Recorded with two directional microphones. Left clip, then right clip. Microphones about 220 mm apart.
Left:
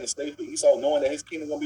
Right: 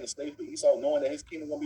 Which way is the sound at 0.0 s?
10° left (ahead or behind).